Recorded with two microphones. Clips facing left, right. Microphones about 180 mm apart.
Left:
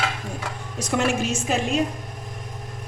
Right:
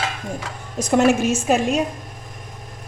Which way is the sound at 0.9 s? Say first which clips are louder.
Right 7 dB; 50° right (ahead or behind).